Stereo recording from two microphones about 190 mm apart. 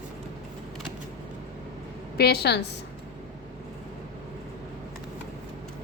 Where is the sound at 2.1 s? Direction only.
55° left (ahead or behind).